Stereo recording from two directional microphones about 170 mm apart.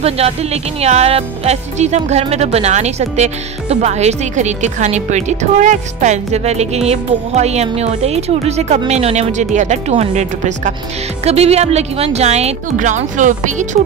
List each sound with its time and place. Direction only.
0.0 s speech: 35° right (ahead or behind)